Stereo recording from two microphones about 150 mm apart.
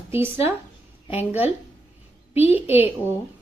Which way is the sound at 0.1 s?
15° right (ahead or behind).